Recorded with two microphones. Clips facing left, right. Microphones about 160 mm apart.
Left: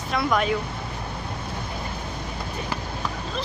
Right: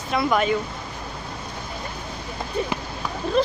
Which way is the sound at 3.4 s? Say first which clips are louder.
Right 12 dB; 55° right (ahead or behind).